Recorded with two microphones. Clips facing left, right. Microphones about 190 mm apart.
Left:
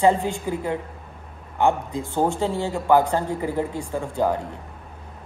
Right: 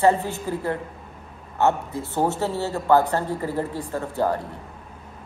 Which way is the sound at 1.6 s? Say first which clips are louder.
Left 1 dB; 10° left (ahead or behind).